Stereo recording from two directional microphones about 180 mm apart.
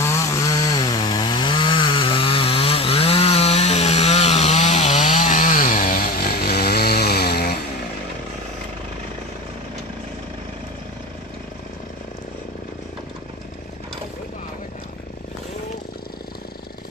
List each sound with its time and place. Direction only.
0.0 s chainsaw: 15° left (ahead or behind); by 7.5 s 60° left (ahead or behind)